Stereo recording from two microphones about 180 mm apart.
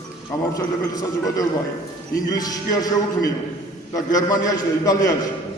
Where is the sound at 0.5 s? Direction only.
20° left (ahead or behind).